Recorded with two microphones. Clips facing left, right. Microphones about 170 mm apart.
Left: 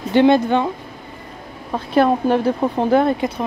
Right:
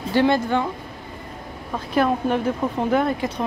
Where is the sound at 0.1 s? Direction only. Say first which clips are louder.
Left 5 dB; 20° left (ahead or behind).